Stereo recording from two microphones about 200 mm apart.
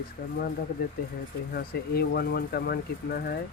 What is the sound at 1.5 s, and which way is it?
Speech, 50° left (ahead or behind).